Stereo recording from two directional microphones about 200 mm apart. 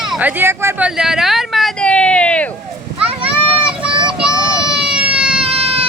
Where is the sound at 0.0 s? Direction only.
5° right (ahead or behind).